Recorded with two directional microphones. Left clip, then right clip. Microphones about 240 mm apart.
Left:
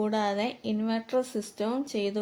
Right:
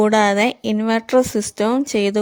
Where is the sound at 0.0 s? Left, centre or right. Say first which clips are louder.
Right 13 dB; right.